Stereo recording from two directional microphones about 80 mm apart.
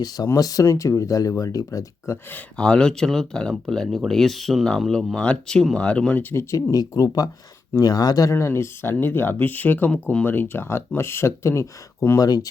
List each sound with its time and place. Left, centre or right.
0.0 s speech: left
2.6 s speech: centre
6.1 s speech: left
6.7 s speech: left
8.3 s speech: left
12.2 s speech: left